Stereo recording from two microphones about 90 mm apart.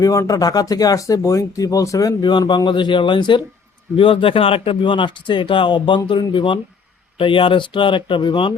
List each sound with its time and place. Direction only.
0.0 s speech: 40° left (ahead or behind)
2.5 s speech: 60° left (ahead or behind)
3.9 s a man's voice: 75° left (ahead or behind)